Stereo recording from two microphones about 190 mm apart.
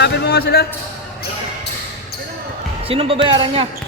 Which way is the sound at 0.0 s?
60° left (ahead or behind).